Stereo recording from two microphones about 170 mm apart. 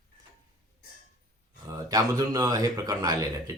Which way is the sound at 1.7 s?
20° right (ahead or behind).